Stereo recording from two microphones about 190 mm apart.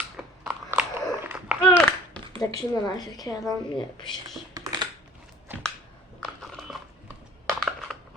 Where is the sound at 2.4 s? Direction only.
20° left (ahead or behind).